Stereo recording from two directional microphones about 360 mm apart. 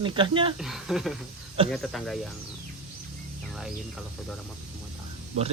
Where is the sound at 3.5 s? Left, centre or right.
Centre.